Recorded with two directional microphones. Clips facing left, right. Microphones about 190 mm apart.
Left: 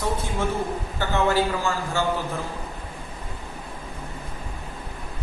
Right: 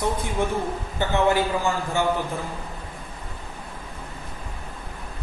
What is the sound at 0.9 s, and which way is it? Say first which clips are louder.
A man's voice: right 1 dB; 15° right (ahead or behind).